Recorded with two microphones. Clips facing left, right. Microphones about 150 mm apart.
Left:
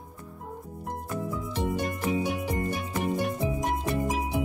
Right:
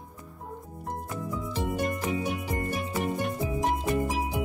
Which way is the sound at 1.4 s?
Centre (ahead or behind).